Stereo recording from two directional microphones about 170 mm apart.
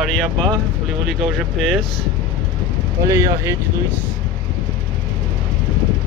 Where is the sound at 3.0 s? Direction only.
20° right (ahead or behind).